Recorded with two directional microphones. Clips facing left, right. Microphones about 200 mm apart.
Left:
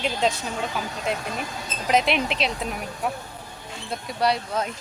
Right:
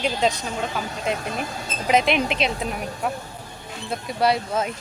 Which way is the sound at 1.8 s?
Centre (ahead or behind).